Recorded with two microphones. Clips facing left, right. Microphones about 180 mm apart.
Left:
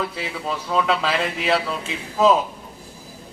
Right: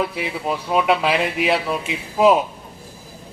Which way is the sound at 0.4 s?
15° right (ahead or behind).